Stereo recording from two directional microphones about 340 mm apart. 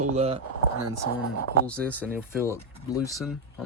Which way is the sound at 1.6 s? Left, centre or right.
Centre.